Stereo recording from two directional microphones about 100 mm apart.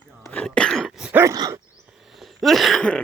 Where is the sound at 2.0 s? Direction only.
Centre (ahead or behind).